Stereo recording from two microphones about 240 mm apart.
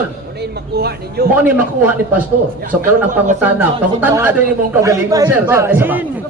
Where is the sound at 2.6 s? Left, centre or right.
Right.